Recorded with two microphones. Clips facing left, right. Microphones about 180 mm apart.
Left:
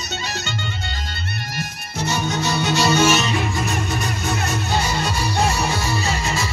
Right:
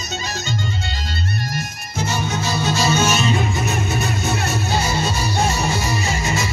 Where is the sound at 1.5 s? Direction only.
70° left (ahead or behind).